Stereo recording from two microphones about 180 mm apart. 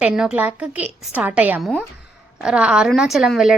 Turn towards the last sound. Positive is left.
turn(degrees=0)  # may be behind; listen again after turning